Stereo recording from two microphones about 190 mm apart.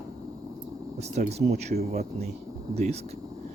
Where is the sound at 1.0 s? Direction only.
35° right (ahead or behind).